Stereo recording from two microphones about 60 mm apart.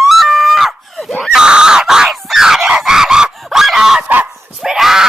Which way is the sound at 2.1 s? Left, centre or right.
Centre.